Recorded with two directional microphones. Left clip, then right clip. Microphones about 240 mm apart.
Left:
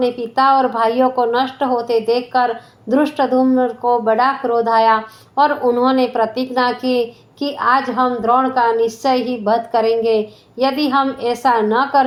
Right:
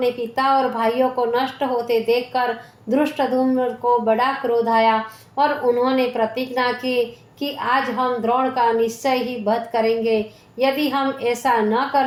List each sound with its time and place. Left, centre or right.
0.0 s a woman's voice: left